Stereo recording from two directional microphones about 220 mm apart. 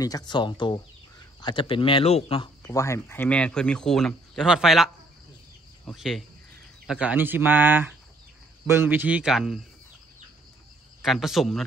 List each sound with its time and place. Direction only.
0.0 s speech: 20° left (ahead or behind); by 9.6 s centre (ahead or behind)
11.0 s speech: centre (ahead or behind)